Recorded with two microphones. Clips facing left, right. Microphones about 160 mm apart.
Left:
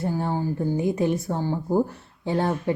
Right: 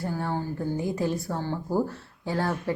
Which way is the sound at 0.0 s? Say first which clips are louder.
Left 4 dB; 20° left (ahead or behind).